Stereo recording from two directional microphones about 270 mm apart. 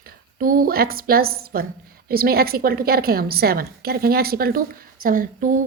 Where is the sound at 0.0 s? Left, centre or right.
Right.